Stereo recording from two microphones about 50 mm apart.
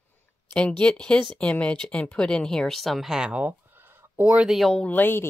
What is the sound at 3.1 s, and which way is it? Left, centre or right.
Speech, centre.